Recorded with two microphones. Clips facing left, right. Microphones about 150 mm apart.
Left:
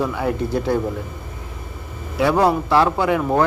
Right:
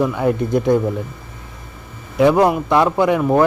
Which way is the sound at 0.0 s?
15° right (ahead or behind).